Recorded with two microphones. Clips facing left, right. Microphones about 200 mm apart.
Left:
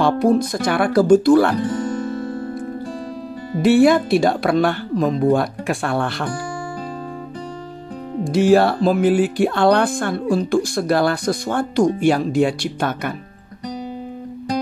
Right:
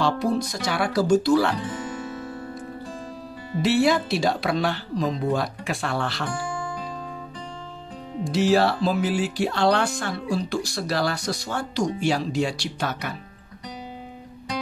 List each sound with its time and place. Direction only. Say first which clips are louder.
0.0 s speech: left 7 dB; 55° left (ahead or behind)
3.5 s speech: left 7 dB; 55° left (ahead or behind)
8.2 s speech: left 6 dB; 50° left (ahead or behind)